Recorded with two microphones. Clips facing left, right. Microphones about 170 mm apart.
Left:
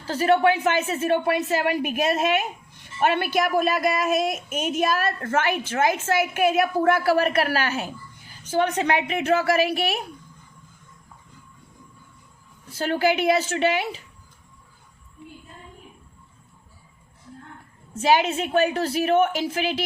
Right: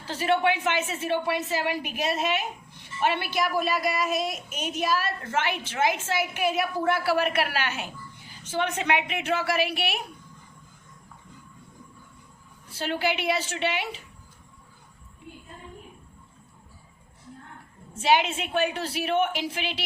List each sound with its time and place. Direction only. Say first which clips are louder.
0.1 s a woman's voice: left 5 dB; 40° left (ahead or behind)
12.7 s a woman's voice: left 6 dB; 45° left (ahead or behind)
17.9 s a woman's voice: left 3 dB; 40° left (ahead or behind)